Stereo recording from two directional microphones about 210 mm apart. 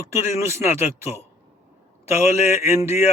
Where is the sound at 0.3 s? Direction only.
10° right (ahead or behind).